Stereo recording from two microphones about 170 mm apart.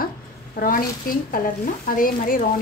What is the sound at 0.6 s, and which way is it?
Speech, 55° left (ahead or behind).